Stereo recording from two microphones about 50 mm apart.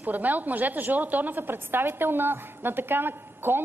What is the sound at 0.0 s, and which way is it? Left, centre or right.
A woman's voice, right.